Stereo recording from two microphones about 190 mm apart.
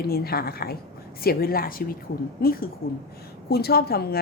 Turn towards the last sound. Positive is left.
turn(degrees=55)  # may be behind; listen again after turning